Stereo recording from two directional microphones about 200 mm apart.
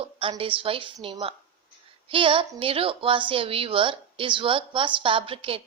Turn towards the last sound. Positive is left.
turn(degrees=-30)  # may be behind; listen again after turning